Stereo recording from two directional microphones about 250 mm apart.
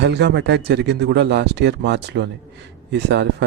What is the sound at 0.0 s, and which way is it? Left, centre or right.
A man's voice, right.